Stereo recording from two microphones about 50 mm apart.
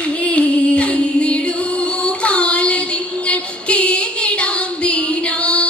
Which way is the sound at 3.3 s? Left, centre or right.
Left.